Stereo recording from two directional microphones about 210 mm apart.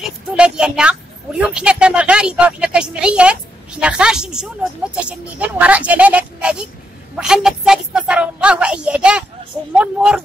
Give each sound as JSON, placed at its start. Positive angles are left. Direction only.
{"t": 0.3, "sound": "a woman's voice", "side_deg": -5}